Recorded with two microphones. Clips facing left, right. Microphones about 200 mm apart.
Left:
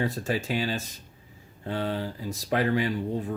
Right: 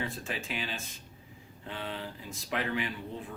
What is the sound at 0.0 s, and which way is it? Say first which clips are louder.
Speech: left 9 dB; 40° left (ahead or behind).